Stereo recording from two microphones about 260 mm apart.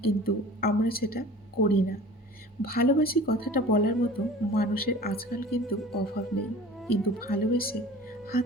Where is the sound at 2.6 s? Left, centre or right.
Left.